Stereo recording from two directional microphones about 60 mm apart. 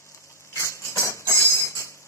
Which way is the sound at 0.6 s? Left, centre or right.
Left.